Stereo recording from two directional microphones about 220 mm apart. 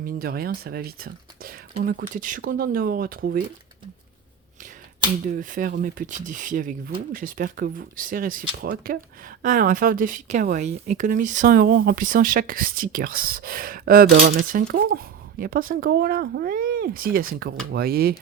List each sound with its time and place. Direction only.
0.0 s speech: 45° right (ahead or behind)
5.3 s speech: 40° right (ahead or behind)